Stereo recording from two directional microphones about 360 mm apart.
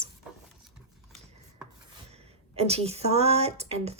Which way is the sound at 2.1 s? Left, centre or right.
Centre.